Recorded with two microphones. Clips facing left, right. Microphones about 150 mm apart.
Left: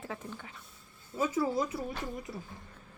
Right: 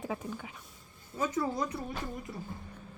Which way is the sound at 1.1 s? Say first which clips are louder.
Left 2 dB; 10° left (ahead or behind).